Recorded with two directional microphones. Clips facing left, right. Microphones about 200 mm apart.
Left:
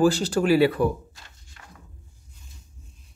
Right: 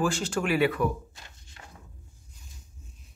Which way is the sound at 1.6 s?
25° right (ahead or behind).